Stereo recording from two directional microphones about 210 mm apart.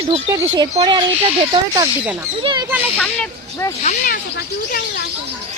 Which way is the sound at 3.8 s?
40° left (ahead or behind).